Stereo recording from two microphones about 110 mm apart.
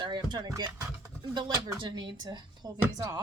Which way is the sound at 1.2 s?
45° right (ahead or behind).